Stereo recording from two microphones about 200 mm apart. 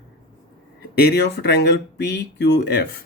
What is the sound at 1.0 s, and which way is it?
Speech, 55° left (ahead or behind).